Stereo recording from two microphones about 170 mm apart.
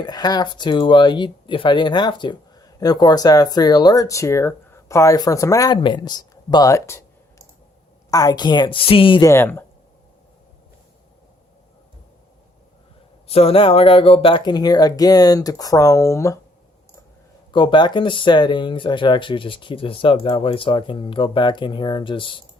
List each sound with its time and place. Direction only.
0.0 s speech: 25° left (ahead or behind)
9.3 s speech: 15° left (ahead or behind)
13.2 s speech: 35° left (ahead or behind); by 16.4 s 20° left (ahead or behind)
17.5 s speech: 30° left (ahead or behind)